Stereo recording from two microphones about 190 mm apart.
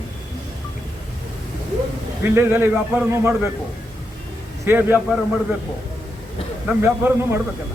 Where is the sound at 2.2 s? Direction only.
10° right (ahead or behind).